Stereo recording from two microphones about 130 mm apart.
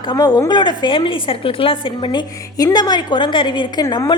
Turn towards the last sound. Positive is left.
turn(degrees=35)  # may be behind; listen again after turning